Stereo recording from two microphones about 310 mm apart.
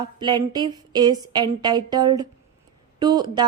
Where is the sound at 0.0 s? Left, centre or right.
Centre.